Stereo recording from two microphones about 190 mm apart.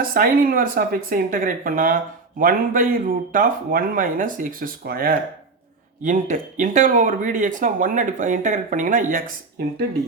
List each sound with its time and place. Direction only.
0.0 s speech: 50° right (ahead or behind)